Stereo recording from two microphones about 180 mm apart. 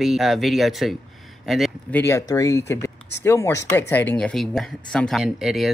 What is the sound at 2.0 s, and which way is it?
Speech, 15° left (ahead or behind).